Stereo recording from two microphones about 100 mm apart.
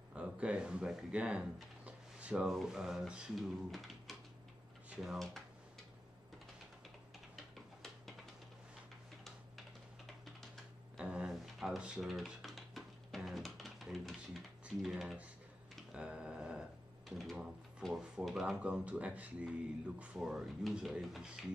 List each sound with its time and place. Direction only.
0.1 s speech: 10° right (ahead or behind)
10.0 s typing: centre (ahead or behind)
11.0 s a sound: 10° right (ahead or behind)
15.7 s tick-tock: 5° right (ahead or behind)
17.2 s speech: 5° right (ahead or behind)